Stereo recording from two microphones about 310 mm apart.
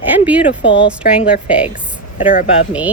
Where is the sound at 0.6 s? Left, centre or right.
Left.